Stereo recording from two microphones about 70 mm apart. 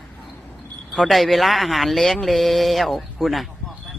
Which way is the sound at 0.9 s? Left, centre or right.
Centre.